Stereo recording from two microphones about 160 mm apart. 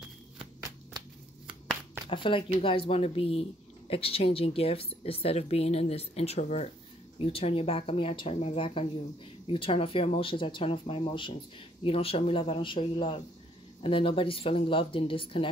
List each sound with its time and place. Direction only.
2.0 s speech: 30° left (ahead or behind)